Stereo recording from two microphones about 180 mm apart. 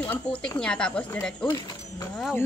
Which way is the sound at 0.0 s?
10° left (ahead or behind).